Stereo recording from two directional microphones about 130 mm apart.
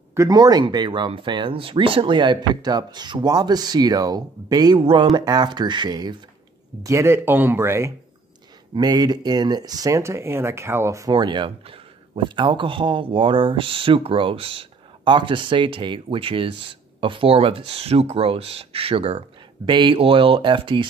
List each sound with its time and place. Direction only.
0.1 s speech: 25° right (ahead or behind)
6.8 s speech: 25° right (ahead or behind)
8.7 s speech: 30° right (ahead or behind)
11.1 s speech: 40° right (ahead or behind)